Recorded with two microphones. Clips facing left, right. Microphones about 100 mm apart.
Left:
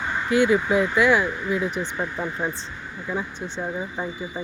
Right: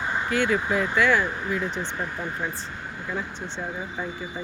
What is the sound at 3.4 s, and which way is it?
Speech, 20° right (ahead or behind).